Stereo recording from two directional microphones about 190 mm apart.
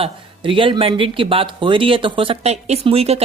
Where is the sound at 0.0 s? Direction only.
25° right (ahead or behind).